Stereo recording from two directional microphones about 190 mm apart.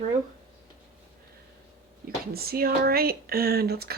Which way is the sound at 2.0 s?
55° right (ahead or behind).